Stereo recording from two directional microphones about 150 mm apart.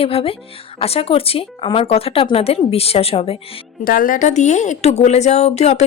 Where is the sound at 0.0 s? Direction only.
40° left (ahead or behind).